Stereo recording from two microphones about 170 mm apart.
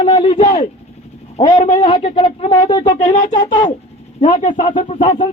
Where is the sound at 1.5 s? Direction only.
50° left (ahead or behind).